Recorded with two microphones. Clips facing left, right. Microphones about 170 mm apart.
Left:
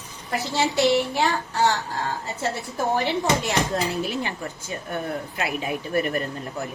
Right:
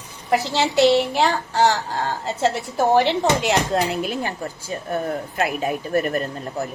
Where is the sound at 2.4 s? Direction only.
85° right; by 6.6 s 40° right (ahead or behind).